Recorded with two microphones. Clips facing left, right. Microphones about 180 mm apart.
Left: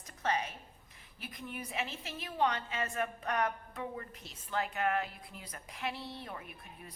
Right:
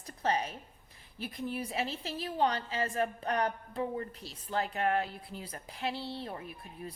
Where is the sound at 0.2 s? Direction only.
35° right (ahead or behind).